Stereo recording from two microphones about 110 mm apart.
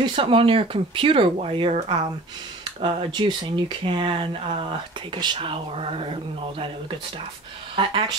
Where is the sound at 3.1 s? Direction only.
40° right (ahead or behind).